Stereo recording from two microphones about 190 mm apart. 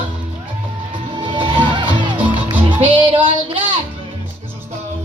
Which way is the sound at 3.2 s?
25° right (ahead or behind).